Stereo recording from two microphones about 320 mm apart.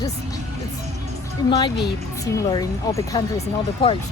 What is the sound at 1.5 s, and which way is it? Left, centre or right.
Speech, centre.